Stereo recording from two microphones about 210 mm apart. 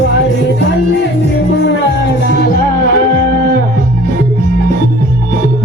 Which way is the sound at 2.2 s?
50° left (ahead or behind).